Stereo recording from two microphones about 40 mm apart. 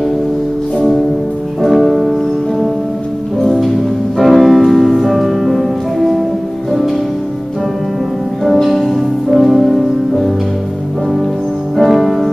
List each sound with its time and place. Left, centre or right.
1.6 s music: centre
3.4 s music: centre
8.5 s music: centre
11.7 s music: centre